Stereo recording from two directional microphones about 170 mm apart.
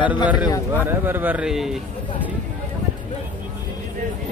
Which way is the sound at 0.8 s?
10° right (ahead or behind).